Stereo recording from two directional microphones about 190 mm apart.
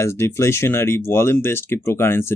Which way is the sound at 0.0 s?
15° left (ahead or behind).